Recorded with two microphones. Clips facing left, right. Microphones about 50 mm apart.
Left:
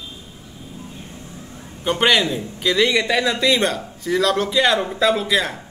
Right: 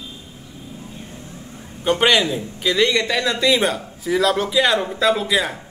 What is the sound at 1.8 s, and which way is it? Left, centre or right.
A man's voice, centre.